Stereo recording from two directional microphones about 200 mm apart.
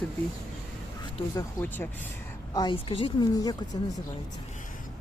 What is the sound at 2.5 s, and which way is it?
A woman's voice, 25° left (ahead or behind).